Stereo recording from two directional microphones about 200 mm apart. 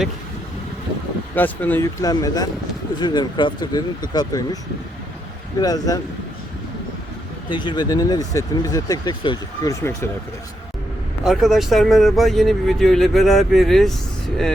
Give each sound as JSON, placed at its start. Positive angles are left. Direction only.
{"t": 1.4, "sound": "speech", "side_deg": 10}
{"t": 5.5, "sound": "speech", "side_deg": 20}
{"t": 7.5, "sound": "speech", "side_deg": 25}
{"t": 11.2, "sound": "speech", "side_deg": 0}